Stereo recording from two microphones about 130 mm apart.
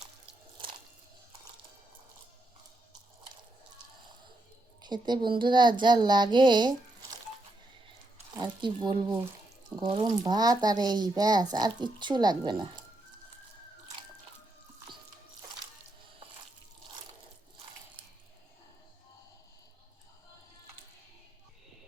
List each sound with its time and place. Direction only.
4.8 s speech: 35° right (ahead or behind)
8.4 s speech: 35° right (ahead or behind)